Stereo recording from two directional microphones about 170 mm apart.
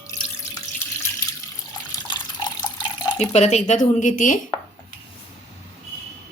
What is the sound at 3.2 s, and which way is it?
Speech, 40° left (ahead or behind).